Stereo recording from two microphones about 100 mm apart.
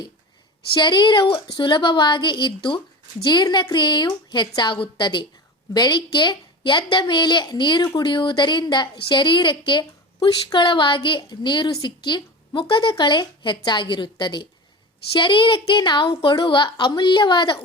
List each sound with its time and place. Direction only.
0.8 s a woman's voice: 50° left (ahead or behind)